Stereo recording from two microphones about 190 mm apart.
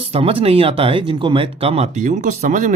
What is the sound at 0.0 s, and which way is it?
Speech, 30° right (ahead or behind).